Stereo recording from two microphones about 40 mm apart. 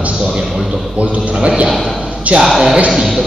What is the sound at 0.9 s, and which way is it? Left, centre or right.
Speech, right.